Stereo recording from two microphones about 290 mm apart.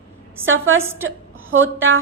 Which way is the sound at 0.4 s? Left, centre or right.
Right.